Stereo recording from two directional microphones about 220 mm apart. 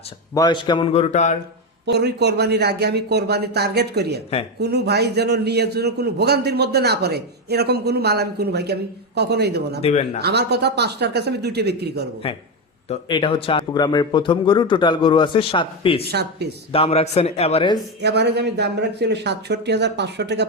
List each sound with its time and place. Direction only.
0.3 s speech: 20° left (ahead or behind)
1.9 s a man's voice: 50° right (ahead or behind)
9.8 s speech: 30° left (ahead or behind)
10.2 s a man's voice: 50° right (ahead or behind)
12.9 s speech: 20° left (ahead or behind)
16.0 s a man's voice: 50° right (ahead or behind)
16.7 s speech: 25° left (ahead or behind)
18.0 s a man's voice: 50° right (ahead or behind)